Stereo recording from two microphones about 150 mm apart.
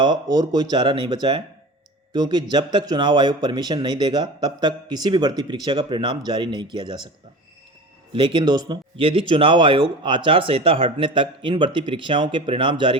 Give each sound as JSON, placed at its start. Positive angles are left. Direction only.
{"t": 0.0, "sound": "speech", "side_deg": -30}
{"t": 8.1, "sound": "speech", "side_deg": -35}